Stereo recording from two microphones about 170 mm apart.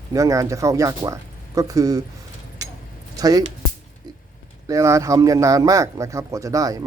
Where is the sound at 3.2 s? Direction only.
20° right (ahead or behind).